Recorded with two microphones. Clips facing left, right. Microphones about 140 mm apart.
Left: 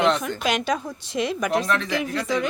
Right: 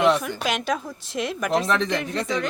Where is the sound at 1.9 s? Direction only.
Centre (ahead or behind).